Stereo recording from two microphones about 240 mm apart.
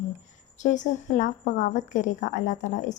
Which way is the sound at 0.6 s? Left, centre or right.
Left.